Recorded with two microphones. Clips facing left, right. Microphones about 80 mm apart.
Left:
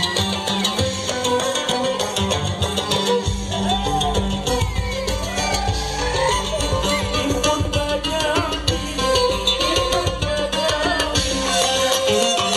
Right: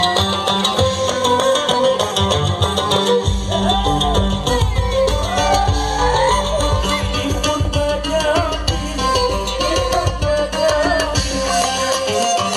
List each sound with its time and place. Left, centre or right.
0.0 s music: right
2.9 s music: right
7.4 s music: centre